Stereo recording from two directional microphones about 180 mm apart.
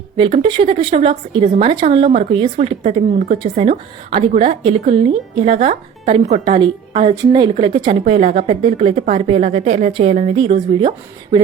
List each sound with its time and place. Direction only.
0.2 s speech: 30° right (ahead or behind)